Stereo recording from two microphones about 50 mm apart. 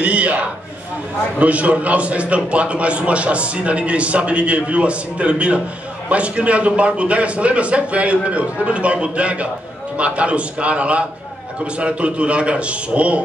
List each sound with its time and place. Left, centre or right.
0.0 s a man's voice: right